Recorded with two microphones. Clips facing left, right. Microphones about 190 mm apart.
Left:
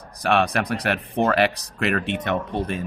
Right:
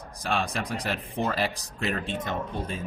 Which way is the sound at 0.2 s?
65° left (ahead or behind).